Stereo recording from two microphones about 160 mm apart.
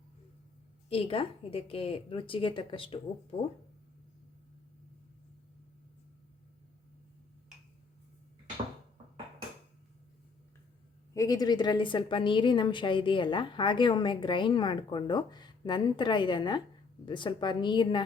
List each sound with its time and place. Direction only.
0.9 s speech: 35° left (ahead or behind)
11.1 s a woman's voice: 20° left (ahead or behind)